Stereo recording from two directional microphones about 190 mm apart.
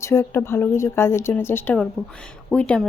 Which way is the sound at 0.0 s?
15° left (ahead or behind).